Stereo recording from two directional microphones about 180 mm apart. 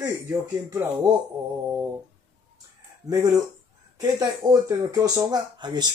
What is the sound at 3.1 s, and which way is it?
Speech, 20° right (ahead or behind).